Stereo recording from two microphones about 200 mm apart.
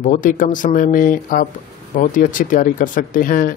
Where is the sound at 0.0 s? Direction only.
40° left (ahead or behind).